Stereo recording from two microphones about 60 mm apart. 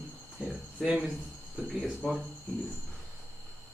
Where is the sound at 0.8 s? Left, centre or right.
Centre.